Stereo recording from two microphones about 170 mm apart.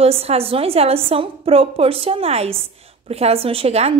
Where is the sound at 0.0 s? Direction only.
35° right (ahead or behind).